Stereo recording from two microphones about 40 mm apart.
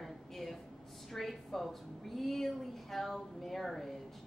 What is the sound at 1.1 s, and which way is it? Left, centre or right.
A man's voice, centre.